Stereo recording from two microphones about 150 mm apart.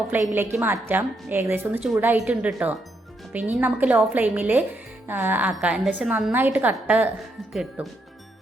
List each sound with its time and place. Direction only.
0.1 s a woman's voice: 15° right (ahead or behind)